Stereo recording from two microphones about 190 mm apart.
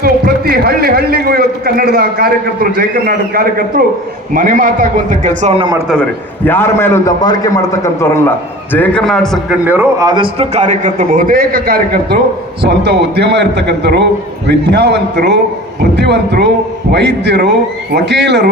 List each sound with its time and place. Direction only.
0.0 s a man's voice: 50° right (ahead or behind); by 5.6 s 35° right (ahead or behind)
5.9 s a man's voice: 10° left (ahead or behind)
9.6 s a man's voice: 10° right (ahead or behind); by 18.5 s 60° right (ahead or behind)